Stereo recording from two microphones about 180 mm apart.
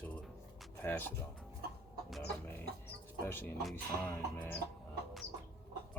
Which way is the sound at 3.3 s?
10° left (ahead or behind).